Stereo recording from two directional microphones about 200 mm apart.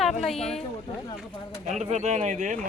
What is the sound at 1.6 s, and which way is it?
Speech, 35° right (ahead or behind).